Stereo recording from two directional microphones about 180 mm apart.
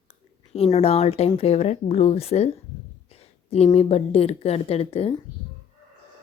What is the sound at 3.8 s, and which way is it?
Speech, 35° left (ahead or behind).